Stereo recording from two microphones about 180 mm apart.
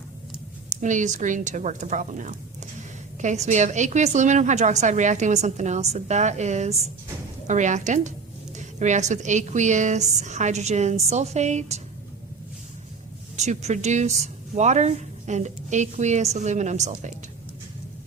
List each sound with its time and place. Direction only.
0.8 s a woman's voice: 45° right (ahead or behind)
13.3 s speech: 40° right (ahead or behind)